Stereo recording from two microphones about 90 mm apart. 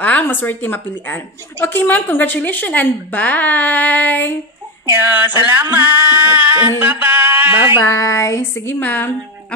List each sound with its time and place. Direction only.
0.0 s a woman's voice: 20° left (ahead or behind)
4.9 s a sound: 20° right (ahead or behind)
6.8 s speech: 20° right (ahead or behind)
7.8 s a woman's voice: 35° left (ahead or behind)